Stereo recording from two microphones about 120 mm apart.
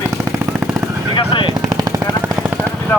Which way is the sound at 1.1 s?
45° left (ahead or behind).